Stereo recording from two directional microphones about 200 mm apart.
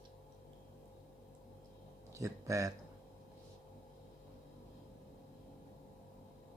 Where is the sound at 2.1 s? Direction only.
15° right (ahead or behind).